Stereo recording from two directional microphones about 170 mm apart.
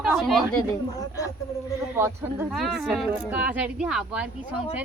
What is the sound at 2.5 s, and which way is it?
A woman's voice, centre (ahead or behind).